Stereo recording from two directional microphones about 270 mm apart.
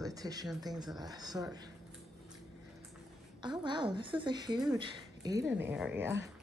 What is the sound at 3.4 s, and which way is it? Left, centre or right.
A woman's voice, centre.